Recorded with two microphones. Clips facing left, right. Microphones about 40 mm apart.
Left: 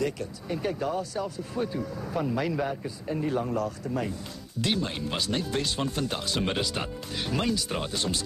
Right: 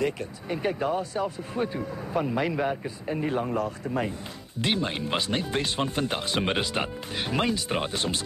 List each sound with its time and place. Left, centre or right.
0.0 s speech: right